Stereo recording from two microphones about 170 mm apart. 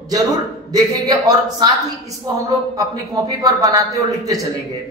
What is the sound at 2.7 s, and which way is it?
Speech, 20° right (ahead or behind).